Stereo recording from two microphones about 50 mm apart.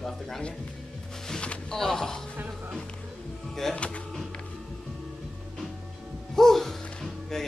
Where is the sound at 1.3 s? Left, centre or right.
Centre.